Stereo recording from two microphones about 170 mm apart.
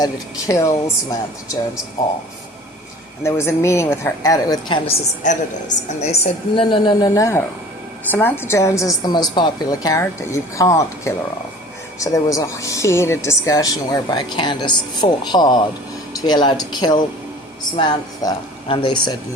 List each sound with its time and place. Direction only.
0.0 s a woman's voice: 20° left (ahead or behind)
3.2 s a woman's voice: 15° left (ahead or behind)
4.9 s a woman's voice: 45° left (ahead or behind); by 7.1 s 25° left (ahead or behind)
7.1 s a woman's voice: 15° left (ahead or behind)